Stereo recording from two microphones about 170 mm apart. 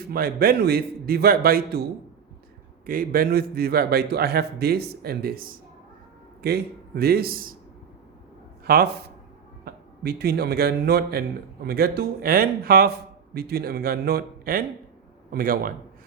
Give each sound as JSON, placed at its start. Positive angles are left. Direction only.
{"t": 0.1, "sound": "a man's voice", "side_deg": -60}
{"t": 2.8, "sound": "a man's voice", "side_deg": -55}
{"t": 8.6, "sound": "a man's voice", "side_deg": -65}